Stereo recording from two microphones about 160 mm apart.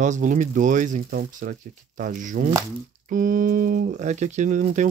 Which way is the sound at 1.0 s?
65° right (ahead or behind).